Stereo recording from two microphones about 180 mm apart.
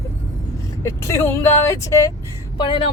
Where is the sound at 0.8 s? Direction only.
15° left (ahead or behind).